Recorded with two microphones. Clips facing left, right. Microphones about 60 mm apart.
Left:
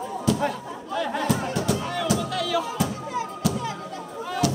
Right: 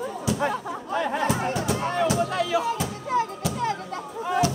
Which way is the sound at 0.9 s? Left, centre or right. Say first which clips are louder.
Even; right.